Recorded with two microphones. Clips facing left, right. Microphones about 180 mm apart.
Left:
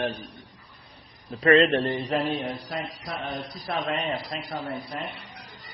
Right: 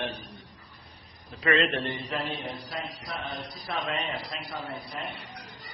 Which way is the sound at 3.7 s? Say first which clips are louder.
Left 4 dB; 45° left (ahead or behind).